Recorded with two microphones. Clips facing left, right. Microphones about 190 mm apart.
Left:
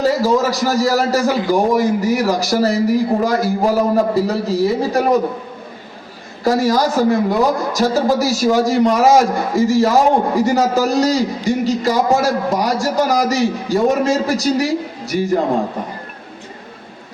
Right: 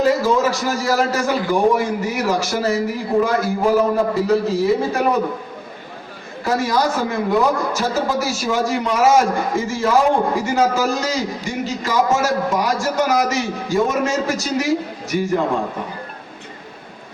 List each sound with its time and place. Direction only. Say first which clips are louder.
0.0 s a man's voice: left 1 dB; 40° left (ahead or behind)
6.4 s a man's voice: left 4 dB; 40° left (ahead or behind)